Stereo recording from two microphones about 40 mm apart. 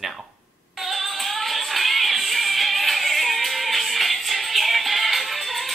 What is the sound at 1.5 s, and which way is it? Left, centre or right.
Music, centre.